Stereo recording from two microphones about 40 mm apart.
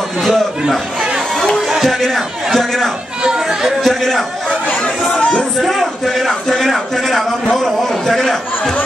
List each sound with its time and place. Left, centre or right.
0.2 s a sound: centre
2.0 s a man's voice: centre
3.3 s speech: centre
3.8 s a man's voice: centre
4.8 s chatter: left
5.6 s a sound: centre